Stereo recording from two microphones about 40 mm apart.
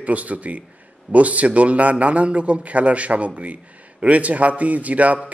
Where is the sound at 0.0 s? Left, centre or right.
Right.